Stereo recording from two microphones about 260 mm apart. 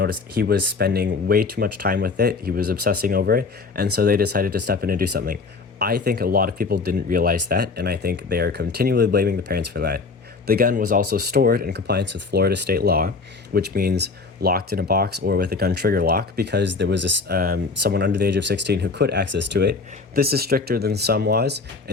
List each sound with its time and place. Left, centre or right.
0.0 s speech: right